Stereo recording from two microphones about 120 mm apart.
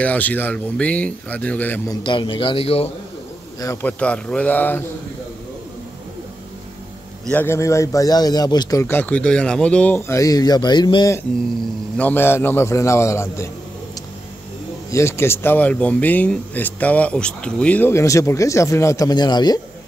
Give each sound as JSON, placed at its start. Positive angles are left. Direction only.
{"t": 0.0, "sound": "speech", "side_deg": 15}
{"t": 2.0, "sound": "speech", "side_deg": 45}
{"t": 3.5, "sound": "speech", "side_deg": 25}
{"t": 3.8, "sound": "speech", "side_deg": 10}
{"t": 7.2, "sound": "speech", "side_deg": 20}
{"t": 8.8, "sound": "speech", "side_deg": 15}
{"t": 12.0, "sound": "speech", "side_deg": 15}
{"t": 14.9, "sound": "speech", "side_deg": 25}